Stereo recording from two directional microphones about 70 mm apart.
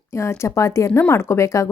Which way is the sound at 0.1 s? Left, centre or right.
Left.